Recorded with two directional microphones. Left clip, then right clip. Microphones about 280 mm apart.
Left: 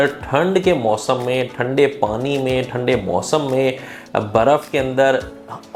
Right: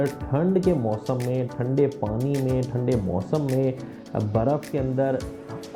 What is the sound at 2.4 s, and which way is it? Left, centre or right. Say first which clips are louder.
Speech: left 8 dB; centre.